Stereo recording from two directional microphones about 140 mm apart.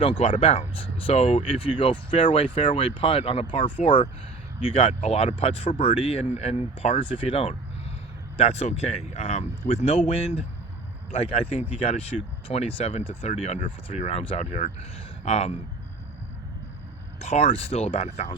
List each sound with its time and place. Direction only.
0.0 s speech: 40° left (ahead or behind)
17.2 s speech: 50° left (ahead or behind)